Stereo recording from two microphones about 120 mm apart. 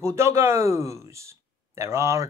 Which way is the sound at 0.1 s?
25° right (ahead or behind).